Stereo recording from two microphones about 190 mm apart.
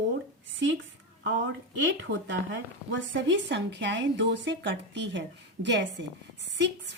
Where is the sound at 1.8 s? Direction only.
80° right.